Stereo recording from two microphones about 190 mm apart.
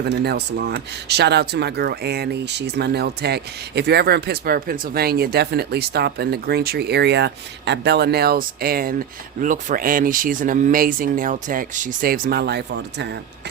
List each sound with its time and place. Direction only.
0.0 s speech: 60° right (ahead or behind)